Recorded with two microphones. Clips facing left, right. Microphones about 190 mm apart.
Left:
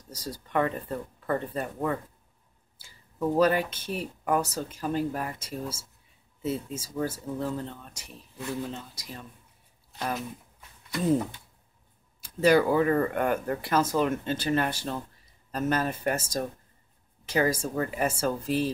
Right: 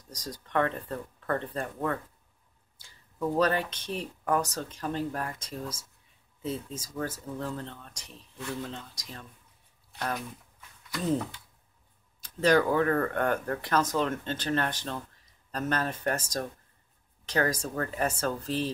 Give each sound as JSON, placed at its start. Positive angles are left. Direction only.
{"t": 0.1, "sound": "speech", "side_deg": 5}
{"t": 11.0, "sound": "speech", "side_deg": 15}